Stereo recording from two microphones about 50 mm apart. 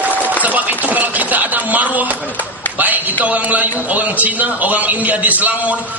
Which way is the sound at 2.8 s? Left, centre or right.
Right.